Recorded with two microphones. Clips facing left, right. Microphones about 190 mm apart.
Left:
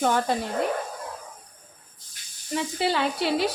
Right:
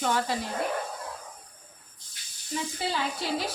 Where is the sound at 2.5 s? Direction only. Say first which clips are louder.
Left 6 dB; 70° left (ahead or behind).